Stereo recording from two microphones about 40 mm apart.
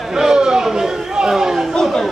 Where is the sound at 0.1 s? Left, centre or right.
Centre.